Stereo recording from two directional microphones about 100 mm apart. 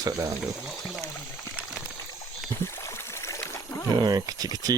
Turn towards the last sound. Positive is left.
turn(degrees=-40)  # may be behind; listen again after turning